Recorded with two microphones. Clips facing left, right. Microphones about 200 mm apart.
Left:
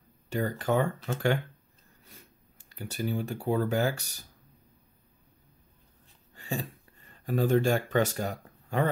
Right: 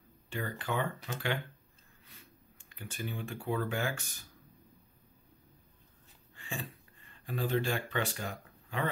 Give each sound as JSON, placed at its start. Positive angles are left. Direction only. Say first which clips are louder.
{"t": 0.3, "sound": "speech", "louder": "left 8 dB", "side_deg": 40}
{"t": 2.7, "sound": "speech", "louder": "left 9 dB", "side_deg": 40}
{"t": 6.3, "sound": "speech", "louder": "left 7 dB", "side_deg": 40}